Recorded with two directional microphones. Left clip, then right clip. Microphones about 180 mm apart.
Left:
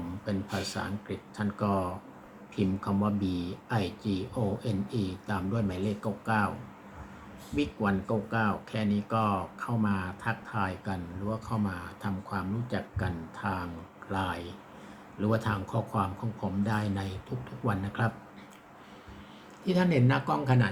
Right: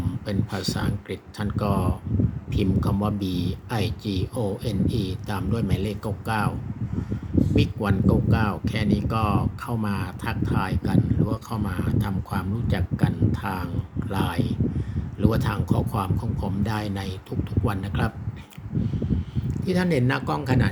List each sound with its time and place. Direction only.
0.3 s speech: 45° right (ahead or behind)
7.5 s speech: 45° right (ahead or behind)
19.6 s speech: 40° right (ahead or behind)